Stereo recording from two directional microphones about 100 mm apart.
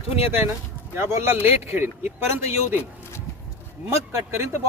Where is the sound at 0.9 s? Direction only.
25° right (ahead or behind).